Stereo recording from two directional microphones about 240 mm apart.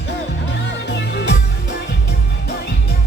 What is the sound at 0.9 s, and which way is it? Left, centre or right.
Music, left.